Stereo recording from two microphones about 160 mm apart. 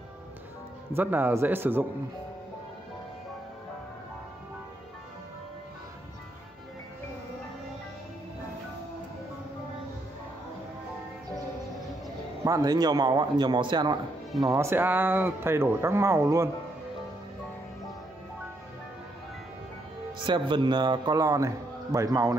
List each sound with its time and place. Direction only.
0.9 s speech: 10° right (ahead or behind)
12.4 s a man's voice: 20° right (ahead or behind)
14.5 s speech: 15° right (ahead or behind)
20.2 s a man's voice: 30° right (ahead or behind)